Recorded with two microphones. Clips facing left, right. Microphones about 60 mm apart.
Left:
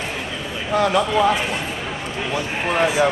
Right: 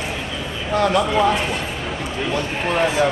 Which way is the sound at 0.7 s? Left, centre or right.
Centre.